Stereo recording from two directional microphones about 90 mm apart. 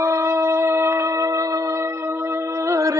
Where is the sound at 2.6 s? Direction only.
35° right (ahead or behind).